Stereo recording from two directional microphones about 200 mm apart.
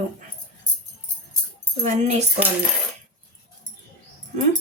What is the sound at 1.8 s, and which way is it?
Speech, 35° right (ahead or behind).